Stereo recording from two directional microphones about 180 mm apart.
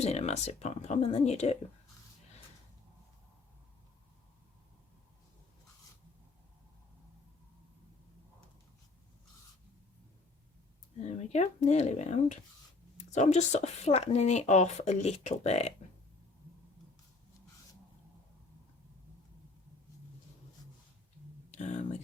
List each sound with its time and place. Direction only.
0.0 s speech: 35° left (ahead or behind)
11.0 s speech: 40° left (ahead or behind)
21.5 s speech: 40° left (ahead or behind)